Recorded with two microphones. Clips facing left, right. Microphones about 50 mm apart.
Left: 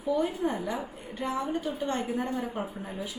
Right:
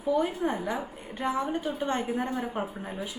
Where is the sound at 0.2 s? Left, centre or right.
Right.